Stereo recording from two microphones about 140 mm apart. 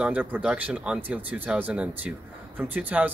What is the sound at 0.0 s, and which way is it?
Speech, 10° right (ahead or behind).